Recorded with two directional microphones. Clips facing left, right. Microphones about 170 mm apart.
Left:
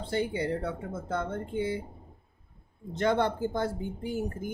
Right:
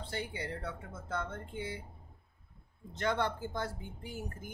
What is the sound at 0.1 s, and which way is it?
Speech, 25° left (ahead or behind).